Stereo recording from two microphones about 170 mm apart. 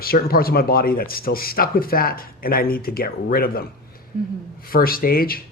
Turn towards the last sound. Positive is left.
turn(degrees=60)  # may be behind; listen again after turning